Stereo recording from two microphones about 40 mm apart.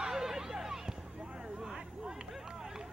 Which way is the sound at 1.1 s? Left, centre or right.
Right.